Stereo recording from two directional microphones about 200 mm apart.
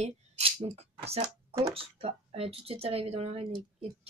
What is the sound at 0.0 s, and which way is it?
Speech, 30° right (ahead or behind).